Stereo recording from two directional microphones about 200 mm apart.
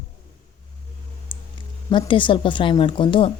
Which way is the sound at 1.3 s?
25° left (ahead or behind).